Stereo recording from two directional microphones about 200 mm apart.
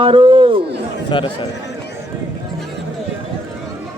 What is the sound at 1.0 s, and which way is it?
Speech, 25° left (ahead or behind).